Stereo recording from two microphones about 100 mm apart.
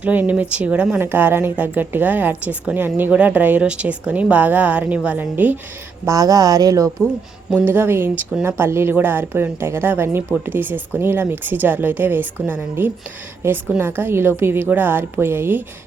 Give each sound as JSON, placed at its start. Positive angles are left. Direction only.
{"t": 0.0, "sound": "a woman's voice", "side_deg": -15}
{"t": 6.1, "sound": "speech", "side_deg": -35}
{"t": 7.5, "sound": "speech", "side_deg": -20}